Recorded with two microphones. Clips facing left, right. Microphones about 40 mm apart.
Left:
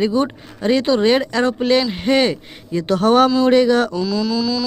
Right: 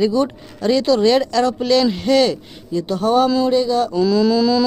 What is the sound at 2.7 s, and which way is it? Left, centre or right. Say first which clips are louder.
Speech: left 2 dB; left.